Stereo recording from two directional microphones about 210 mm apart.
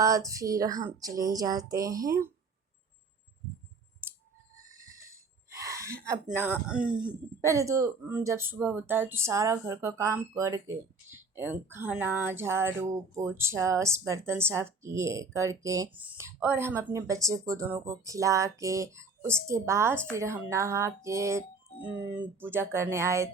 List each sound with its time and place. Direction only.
0.0 s speech: 15° right (ahead or behind)
5.0 s a sound: 15° right (ahead or behind)
6.3 s speech: 5° right (ahead or behind)